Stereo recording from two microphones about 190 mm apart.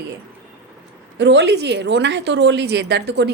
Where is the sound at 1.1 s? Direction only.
65° right (ahead or behind).